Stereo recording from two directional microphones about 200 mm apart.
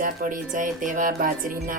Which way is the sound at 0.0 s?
40° right (ahead or behind).